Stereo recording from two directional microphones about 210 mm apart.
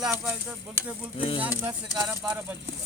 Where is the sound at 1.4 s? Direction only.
5° right (ahead or behind).